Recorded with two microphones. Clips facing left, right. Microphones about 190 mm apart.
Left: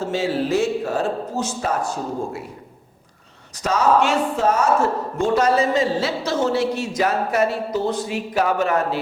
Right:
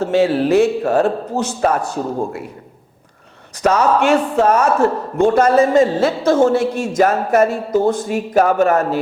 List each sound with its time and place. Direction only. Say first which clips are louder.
0.0 s speech: right 7 dB; 65° right (ahead or behind)
3.6 s a man's voice: right 3 dB; 60° right (ahead or behind); by 9.0 s 45° right (ahead or behind)